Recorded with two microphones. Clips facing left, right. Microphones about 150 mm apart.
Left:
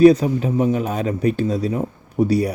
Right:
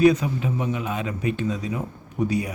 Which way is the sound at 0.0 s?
35° left (ahead or behind).